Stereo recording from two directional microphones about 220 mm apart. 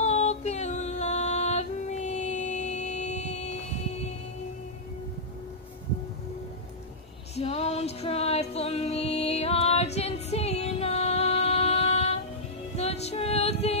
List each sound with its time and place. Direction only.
0.0 s music: 30° left (ahead or behind)
7.3 s music: 30° left (ahead or behind)